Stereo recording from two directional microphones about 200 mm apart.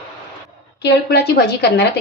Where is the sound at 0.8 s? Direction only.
55° left (ahead or behind).